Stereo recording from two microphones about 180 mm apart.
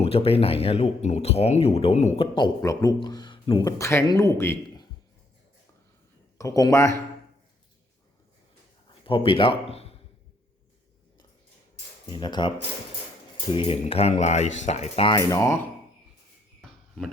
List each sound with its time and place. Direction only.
0.0 s speech: 35° left (ahead or behind)
2.6 s speech: 20° left (ahead or behind)
6.4 s speech: 20° left (ahead or behind)
9.0 s speech: 30° left (ahead or behind)
12.0 s speech: 25° left (ahead or behind)